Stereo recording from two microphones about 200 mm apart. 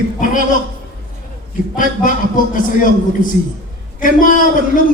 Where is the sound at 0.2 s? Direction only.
40° left (ahead or behind).